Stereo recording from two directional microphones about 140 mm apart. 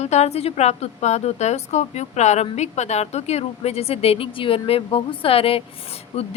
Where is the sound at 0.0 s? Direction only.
50° left (ahead or behind).